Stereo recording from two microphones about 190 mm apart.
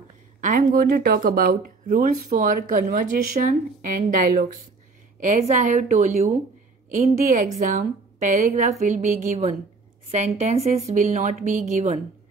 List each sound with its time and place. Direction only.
0.4 s a woman's voice: 45° right (ahead or behind)